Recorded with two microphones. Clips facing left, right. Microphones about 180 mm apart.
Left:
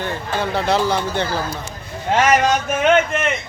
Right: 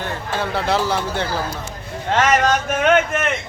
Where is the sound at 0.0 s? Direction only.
Centre (ahead or behind).